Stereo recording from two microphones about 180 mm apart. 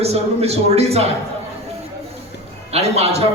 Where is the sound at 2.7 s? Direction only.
35° right (ahead or behind).